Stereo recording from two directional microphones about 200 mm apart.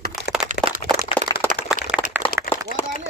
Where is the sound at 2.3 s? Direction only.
45° right (ahead or behind).